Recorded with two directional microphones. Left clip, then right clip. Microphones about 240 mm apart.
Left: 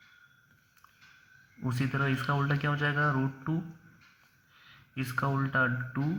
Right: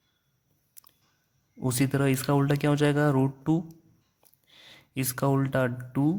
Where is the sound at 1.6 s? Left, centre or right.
Right.